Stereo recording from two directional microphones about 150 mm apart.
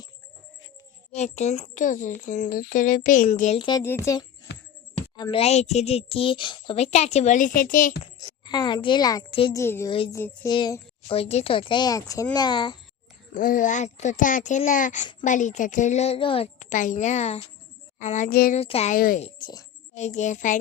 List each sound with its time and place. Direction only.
1.1 s speech: 45° left (ahead or behind)
3.6 s a woman's voice: 25° left (ahead or behind)
4.5 s music: 90° left
4.9 s a sound: 35° left (ahead or behind)
5.4 s a woman's voice: 45° left (ahead or behind); by 8.0 s 65° left (ahead or behind)
8.2 s a child's voice: 30° left (ahead or behind)
10.5 s a woman's voice: 30° left (ahead or behind)
13.3 s speech: 65° left (ahead or behind); by 16.5 s 40° left (ahead or behind)
16.6 s a woman's voice: 55° left (ahead or behind)
18.3 s a sound: 80° left
18.5 s a woman's voice: 45° left (ahead or behind)
18.9 s speech: 70° left (ahead or behind)
19.4 s speech: 30° left (ahead or behind)
20.1 s speech: 55° left (ahead or behind)